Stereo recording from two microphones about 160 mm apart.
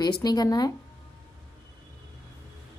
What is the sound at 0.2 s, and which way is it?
Speech, 25° left (ahead or behind).